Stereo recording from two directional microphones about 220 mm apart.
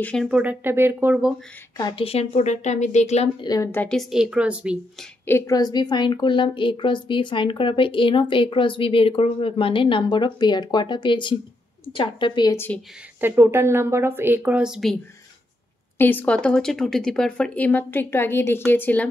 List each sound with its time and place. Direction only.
0.0 s a woman's voice: centre (ahead or behind)
1.8 s a woman's voice: 20° left (ahead or behind)
3.4 s a woman's voice: 15° left (ahead or behind); by 4.7 s 5° right (ahead or behind)
5.2 s a woman's voice: 15° left (ahead or behind)
13.2 s a woman's voice: 10° right (ahead or behind)
16.0 s speech: 10° left (ahead or behind)